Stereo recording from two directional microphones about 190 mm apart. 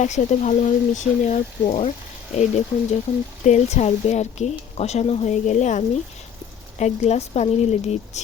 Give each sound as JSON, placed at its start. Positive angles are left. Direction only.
{"t": 0.0, "sound": "a woman's voice", "side_deg": 40}